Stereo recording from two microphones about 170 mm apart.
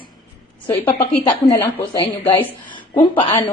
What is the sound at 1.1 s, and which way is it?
A woman's voice, 30° left (ahead or behind).